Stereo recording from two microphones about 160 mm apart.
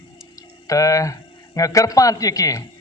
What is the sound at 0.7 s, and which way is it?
A man's voice, 20° left (ahead or behind).